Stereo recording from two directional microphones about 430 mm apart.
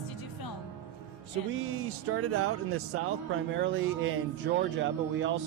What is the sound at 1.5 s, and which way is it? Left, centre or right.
Speech, right.